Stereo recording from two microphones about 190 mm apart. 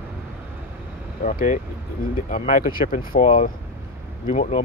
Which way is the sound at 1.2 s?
45° left (ahead or behind).